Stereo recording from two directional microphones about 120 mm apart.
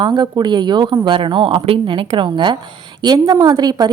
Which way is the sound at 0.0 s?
35° right (ahead or behind).